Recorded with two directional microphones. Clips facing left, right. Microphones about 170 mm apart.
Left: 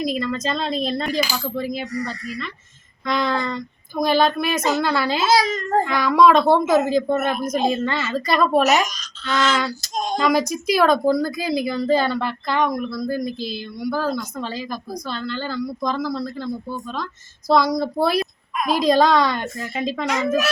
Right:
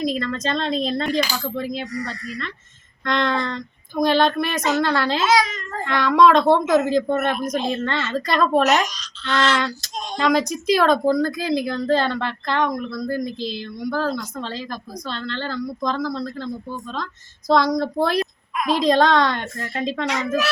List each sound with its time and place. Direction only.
0.0 s a woman's voice: 5° left (ahead or behind)
5.2 s a child's voice: 35° left (ahead or behind)
5.8 s a woman's voice: 5° left (ahead or behind)
9.9 s a sound: 45° left (ahead or behind)
10.2 s a woman's voice: 5° left (ahead or behind)